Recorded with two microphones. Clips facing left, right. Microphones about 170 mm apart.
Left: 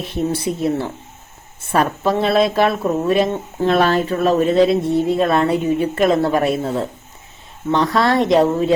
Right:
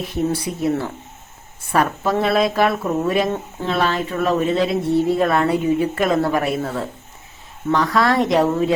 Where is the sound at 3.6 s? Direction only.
45° left (ahead or behind).